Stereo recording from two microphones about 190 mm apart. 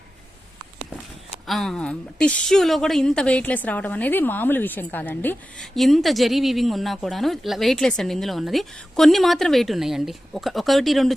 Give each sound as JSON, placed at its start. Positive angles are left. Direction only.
{"t": 1.5, "sound": "a woman's voice", "side_deg": 0}